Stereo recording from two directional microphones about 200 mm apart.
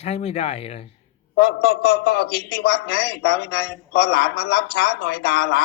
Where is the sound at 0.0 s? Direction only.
30° left (ahead or behind).